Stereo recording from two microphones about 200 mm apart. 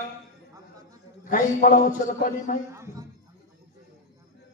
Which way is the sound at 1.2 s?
40° left (ahead or behind).